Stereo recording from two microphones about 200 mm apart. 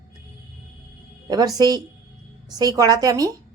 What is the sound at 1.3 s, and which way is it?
A woman's voice, 20° right (ahead or behind).